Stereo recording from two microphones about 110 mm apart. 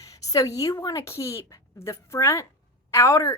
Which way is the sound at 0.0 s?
30° left (ahead or behind).